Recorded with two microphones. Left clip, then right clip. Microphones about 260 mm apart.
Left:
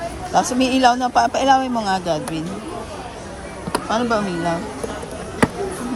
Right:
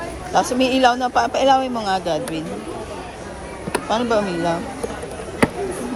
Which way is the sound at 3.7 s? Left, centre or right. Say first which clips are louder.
Right 1 dB; centre.